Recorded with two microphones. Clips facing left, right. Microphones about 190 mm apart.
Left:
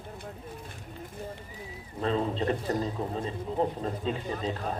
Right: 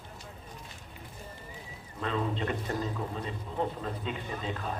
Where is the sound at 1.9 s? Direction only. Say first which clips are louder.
Left 4 dB; 35° left (ahead or behind).